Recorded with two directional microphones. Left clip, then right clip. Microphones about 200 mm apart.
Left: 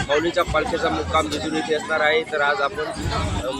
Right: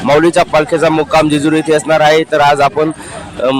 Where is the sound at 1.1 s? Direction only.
55° right (ahead or behind).